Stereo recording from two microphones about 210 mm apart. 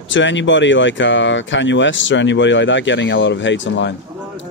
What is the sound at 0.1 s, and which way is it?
Speech, 60° left (ahead or behind).